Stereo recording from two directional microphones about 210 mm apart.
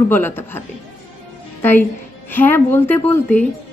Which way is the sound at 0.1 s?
10° left (ahead or behind).